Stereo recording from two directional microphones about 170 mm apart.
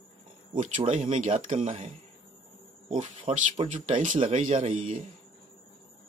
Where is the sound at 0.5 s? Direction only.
50° right (ahead or behind).